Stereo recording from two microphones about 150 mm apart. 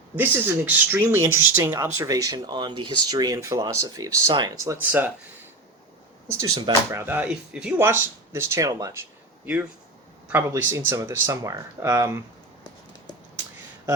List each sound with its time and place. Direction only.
0.2 s speech: 15° right (ahead or behind)
6.4 s speech: 20° right (ahead or behind)
10.5 s speech: 20° right (ahead or behind)